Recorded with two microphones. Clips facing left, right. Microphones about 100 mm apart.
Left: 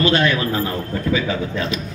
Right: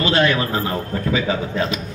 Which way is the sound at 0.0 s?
30° right (ahead or behind).